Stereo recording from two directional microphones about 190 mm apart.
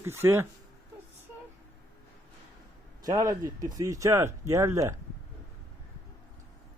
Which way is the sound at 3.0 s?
20° right (ahead or behind).